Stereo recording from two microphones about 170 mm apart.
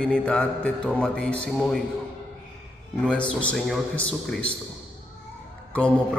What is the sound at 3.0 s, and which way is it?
A man's voice, 5° left (ahead or behind).